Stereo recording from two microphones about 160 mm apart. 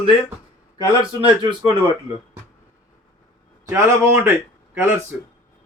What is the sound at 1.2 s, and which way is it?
Speech, 30° right (ahead or behind).